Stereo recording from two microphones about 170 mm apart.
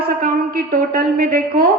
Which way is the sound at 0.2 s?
55° right (ahead or behind).